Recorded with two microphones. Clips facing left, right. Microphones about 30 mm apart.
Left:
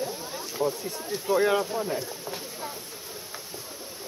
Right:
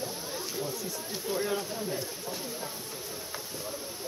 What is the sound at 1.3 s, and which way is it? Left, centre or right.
Speech, left.